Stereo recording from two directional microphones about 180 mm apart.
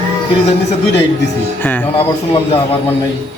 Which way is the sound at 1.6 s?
10° left (ahead or behind).